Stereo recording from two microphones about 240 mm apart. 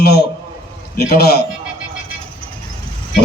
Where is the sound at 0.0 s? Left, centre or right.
Left.